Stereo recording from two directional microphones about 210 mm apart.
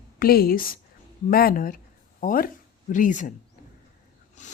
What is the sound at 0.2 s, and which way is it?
A woman's voice, 45° left (ahead or behind).